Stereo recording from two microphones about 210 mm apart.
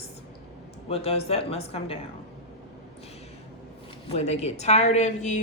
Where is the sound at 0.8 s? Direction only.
30° left (ahead or behind).